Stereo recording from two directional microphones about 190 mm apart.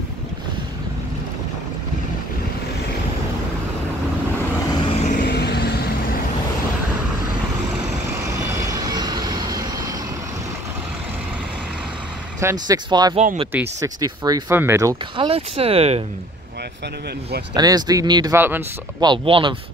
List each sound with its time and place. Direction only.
4.7 s vehicle: 35° left (ahead or behind)
5.2 s vehicle: 55° left (ahead or behind)
8.5 s vehicle: 20° right (ahead or behind)
12.4 s speech: 15° right (ahead or behind)
13.1 s speech: 40° right (ahead or behind)
13.5 s speech: 15° right (ahead or behind)
15.2 s speech: 30° right (ahead or behind)
17.6 s speech: 20° right (ahead or behind)
18.3 s speech: 10° right (ahead or behind)
18.9 s speech: 25° right (ahead or behind)